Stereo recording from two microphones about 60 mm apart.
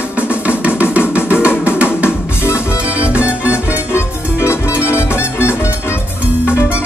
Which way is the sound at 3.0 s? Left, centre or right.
Right.